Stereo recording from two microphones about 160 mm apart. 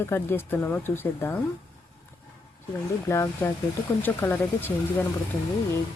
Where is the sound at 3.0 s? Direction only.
15° left (ahead or behind).